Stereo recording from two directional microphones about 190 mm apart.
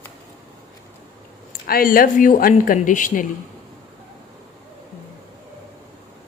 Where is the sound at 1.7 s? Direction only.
50° left (ahead or behind).